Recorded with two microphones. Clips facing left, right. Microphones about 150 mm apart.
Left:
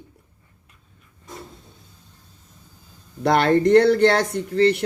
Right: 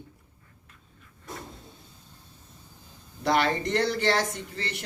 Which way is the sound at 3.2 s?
55° left (ahead or behind).